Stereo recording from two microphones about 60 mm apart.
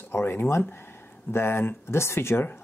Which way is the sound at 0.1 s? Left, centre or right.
Left.